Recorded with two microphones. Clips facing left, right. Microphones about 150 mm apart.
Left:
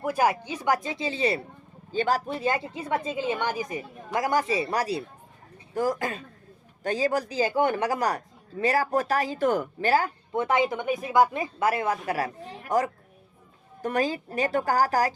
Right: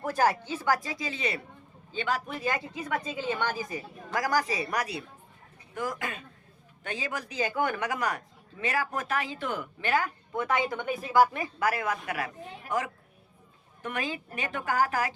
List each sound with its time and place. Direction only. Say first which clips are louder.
0.0 s a man's voice: left 2 dB; 10° left (ahead or behind); by 15.1 s 35° left (ahead or behind)